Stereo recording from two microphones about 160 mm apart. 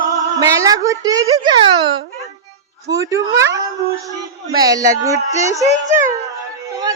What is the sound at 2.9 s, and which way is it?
Speech, 20° right (ahead or behind).